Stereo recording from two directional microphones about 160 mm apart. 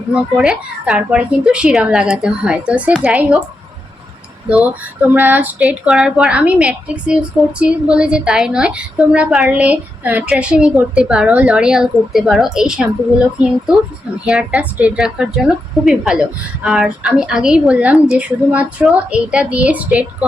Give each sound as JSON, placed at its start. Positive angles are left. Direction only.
{"t": 0.1, "sound": "a woman's voice", "side_deg": -5}
{"t": 4.4, "sound": "a woman's voice", "side_deg": -10}